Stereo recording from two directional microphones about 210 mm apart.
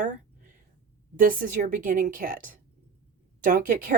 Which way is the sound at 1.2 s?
40° right (ahead or behind).